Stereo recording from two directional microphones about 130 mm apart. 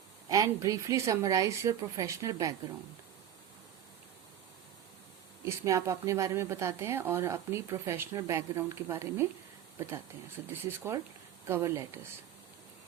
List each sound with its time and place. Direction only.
0.3 s speech: 25° right (ahead or behind)
5.5 s speech: 25° right (ahead or behind)